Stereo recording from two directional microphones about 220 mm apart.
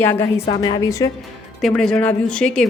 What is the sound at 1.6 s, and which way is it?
Speech, centre (ahead or behind).